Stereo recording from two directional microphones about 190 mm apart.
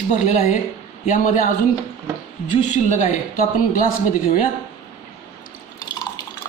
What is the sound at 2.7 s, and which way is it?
Speech, 40° left (ahead or behind).